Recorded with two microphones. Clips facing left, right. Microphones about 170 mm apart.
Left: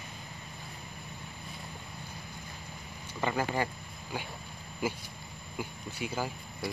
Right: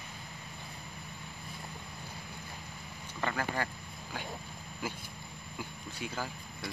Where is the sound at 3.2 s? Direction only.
15° left (ahead or behind).